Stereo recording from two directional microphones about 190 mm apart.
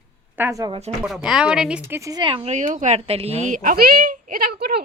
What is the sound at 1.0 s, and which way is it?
Speech, 5° right (ahead or behind).